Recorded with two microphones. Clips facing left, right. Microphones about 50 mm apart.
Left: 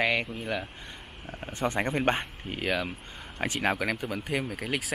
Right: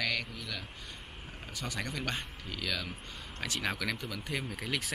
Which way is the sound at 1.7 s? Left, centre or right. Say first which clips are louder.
Left 10 dB; left.